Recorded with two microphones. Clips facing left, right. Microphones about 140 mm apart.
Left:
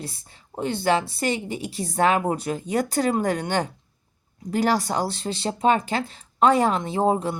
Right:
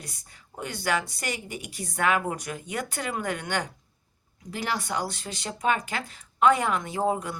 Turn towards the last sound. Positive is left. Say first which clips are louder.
# left 5 dB
turn(degrees=30)  # may be behind; listen again after turning